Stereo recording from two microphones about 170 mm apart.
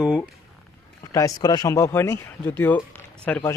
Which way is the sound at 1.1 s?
20° left (ahead or behind).